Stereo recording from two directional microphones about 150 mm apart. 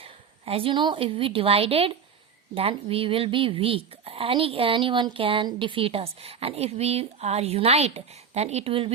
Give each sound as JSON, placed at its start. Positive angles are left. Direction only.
{"t": 0.0, "sound": "a woman's voice", "side_deg": -40}